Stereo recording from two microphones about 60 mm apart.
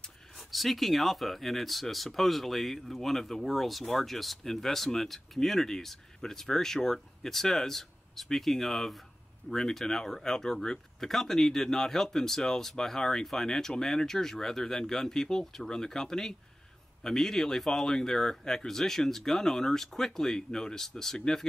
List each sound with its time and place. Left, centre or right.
0.5 s speech: centre